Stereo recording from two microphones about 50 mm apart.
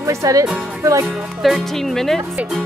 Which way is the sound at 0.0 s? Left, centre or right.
Right.